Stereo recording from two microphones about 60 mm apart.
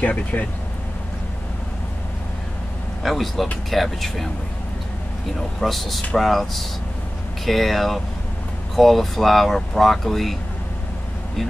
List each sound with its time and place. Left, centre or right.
0.0 s speech: left
3.0 s speech: centre
5.6 s speech: centre